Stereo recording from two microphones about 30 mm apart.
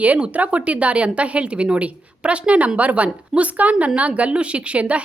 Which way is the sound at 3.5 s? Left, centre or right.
Right.